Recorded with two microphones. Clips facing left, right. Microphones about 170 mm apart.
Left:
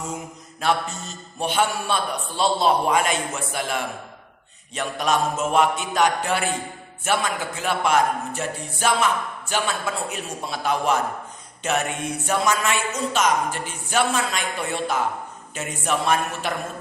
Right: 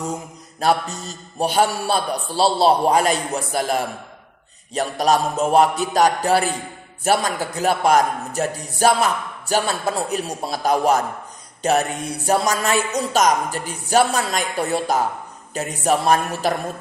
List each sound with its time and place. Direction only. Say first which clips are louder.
0.6 s speech: right 4 dB; 35° right (ahead or behind)